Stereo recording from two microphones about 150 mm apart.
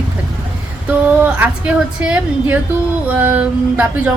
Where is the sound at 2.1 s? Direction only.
10° right (ahead or behind).